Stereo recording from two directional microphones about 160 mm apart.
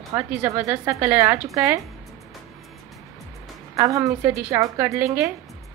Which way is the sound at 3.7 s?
20° right (ahead or behind).